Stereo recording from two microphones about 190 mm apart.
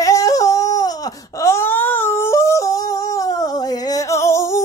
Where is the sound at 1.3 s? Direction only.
15° left (ahead or behind).